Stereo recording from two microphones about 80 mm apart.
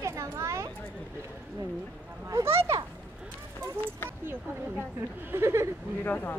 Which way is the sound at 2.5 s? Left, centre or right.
Right.